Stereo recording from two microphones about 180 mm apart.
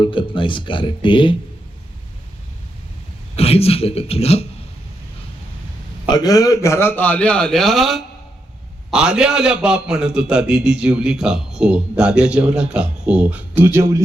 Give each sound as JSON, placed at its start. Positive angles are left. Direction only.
{"t": 0.0, "sound": "speech", "side_deg": 30}
{"t": 3.3, "sound": "a man's voice", "side_deg": 35}
{"t": 6.1, "sound": "a man's voice", "side_deg": 20}